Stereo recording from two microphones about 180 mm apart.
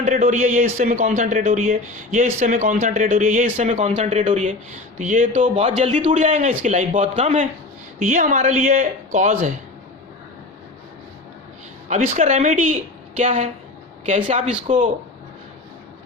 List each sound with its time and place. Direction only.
0.0 s speech: 50° right (ahead or behind)
11.9 s speech: 40° right (ahead or behind)